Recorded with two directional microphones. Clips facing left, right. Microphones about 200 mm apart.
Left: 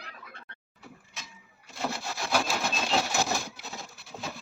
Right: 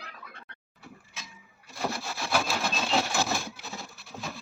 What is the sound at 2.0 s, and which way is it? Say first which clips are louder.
Wood: left 2 dB; 15° left (ahead or behind).